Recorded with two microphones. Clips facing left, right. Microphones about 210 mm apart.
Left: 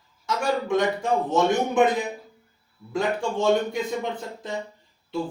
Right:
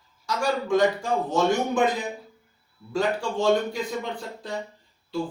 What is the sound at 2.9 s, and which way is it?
Speech, 20° left (ahead or behind).